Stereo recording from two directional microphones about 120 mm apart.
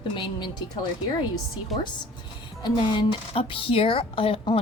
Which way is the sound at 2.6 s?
40° left (ahead or behind).